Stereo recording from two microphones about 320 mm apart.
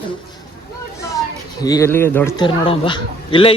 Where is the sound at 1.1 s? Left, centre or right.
Centre.